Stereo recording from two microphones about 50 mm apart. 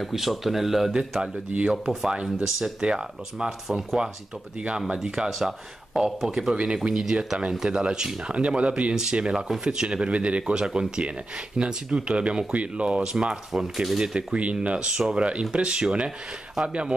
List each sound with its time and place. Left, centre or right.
0.0 s speech: centre
1.5 s speech: right
1.9 s speech: centre
2.8 s speech: centre
6.5 s speech: centre
13.1 s speech: centre